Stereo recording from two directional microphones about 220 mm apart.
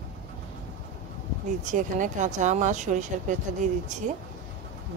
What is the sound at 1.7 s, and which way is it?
A woman's voice, 35° right (ahead or behind).